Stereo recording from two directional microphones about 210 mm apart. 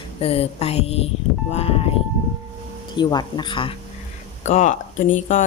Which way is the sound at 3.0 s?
20° left (ahead or behind).